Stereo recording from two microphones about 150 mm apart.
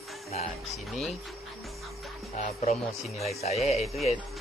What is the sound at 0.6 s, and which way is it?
Speech, centre (ahead or behind).